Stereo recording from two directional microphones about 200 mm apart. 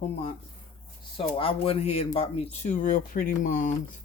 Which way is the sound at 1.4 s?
30° left (ahead or behind).